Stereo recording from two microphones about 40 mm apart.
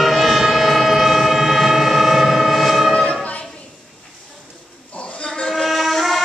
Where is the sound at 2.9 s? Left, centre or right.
Left.